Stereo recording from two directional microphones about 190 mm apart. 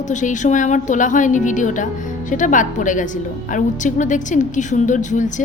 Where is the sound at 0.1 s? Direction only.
40° left (ahead or behind).